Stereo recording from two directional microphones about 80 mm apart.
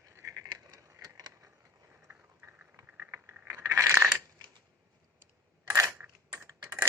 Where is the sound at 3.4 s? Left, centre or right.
Right.